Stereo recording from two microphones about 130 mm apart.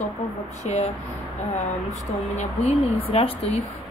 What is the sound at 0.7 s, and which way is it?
Speech, 55° left (ahead or behind).